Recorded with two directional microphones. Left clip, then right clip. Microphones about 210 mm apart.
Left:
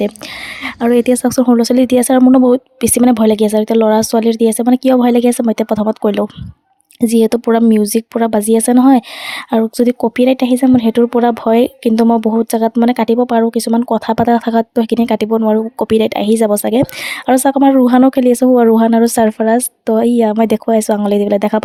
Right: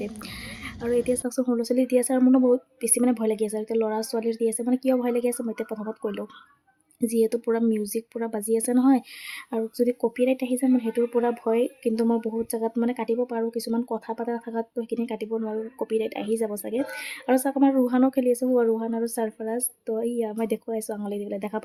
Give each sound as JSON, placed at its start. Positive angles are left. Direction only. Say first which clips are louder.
{"t": 0.6, "sound": "speech", "louder": "left 13 dB", "side_deg": 50}